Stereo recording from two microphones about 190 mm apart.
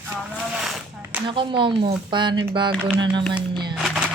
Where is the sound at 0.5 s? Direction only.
Centre (ahead or behind).